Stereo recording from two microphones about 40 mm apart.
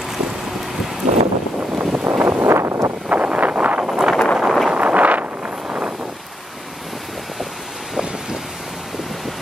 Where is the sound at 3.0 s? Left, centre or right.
Right.